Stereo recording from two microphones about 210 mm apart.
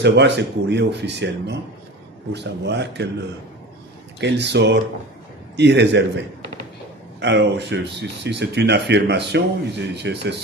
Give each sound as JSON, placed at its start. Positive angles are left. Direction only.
{"t": 0.0, "sound": "speech", "side_deg": -55}
{"t": 4.2, "sound": "speech", "side_deg": -55}